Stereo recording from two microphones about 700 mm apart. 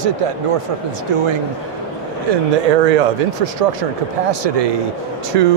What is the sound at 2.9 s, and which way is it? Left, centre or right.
Speech, right.